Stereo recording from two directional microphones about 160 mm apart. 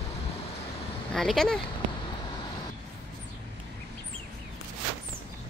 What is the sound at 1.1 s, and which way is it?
Speech, centre (ahead or behind).